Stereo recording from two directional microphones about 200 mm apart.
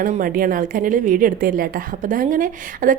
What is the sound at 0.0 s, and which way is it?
A woman's voice, 40° right (ahead or behind).